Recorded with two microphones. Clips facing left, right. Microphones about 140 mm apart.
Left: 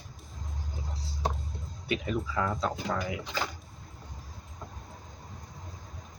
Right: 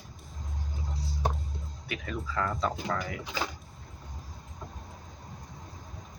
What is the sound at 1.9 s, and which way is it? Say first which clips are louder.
Speech: left 5 dB; 15° left (ahead or behind).